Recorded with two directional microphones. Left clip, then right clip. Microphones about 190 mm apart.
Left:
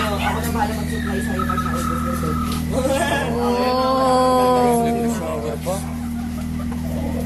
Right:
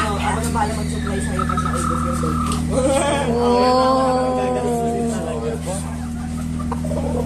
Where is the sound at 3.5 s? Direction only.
20° right (ahead or behind).